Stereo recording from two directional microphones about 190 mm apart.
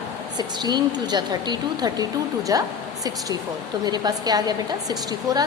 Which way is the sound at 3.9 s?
20° right (ahead or behind).